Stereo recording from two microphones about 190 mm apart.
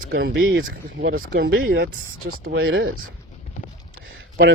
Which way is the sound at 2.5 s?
90° right.